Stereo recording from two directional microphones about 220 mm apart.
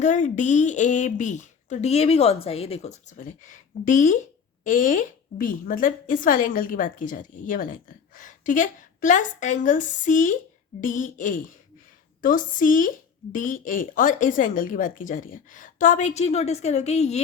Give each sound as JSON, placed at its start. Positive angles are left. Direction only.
{"t": 0.0, "sound": "a woman's voice", "side_deg": 35}